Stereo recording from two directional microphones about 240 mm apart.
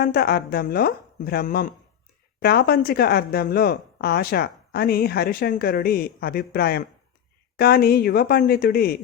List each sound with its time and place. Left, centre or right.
0.0 s speech: left